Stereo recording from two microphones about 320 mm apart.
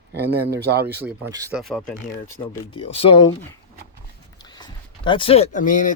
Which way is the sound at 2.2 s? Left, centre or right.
Centre.